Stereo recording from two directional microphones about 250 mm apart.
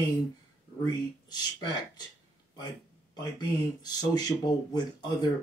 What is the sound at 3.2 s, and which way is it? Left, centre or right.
Speech, centre.